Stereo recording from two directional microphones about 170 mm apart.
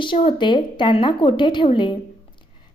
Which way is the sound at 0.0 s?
30° left (ahead or behind).